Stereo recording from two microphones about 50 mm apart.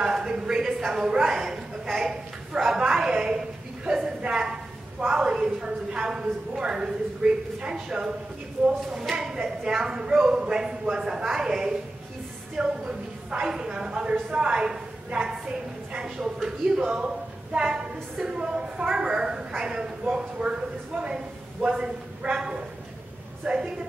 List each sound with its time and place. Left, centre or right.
0.0 s a sound: centre
1.9 s a woman's voice: centre
9.2 s a woman's voice: centre
21.6 s a woman's voice: centre